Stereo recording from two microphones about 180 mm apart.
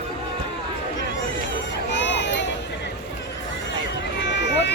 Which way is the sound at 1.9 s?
75° left (ahead or behind).